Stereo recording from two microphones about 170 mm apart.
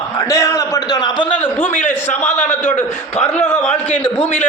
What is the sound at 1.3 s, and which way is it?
A man's voice, 10° left (ahead or behind).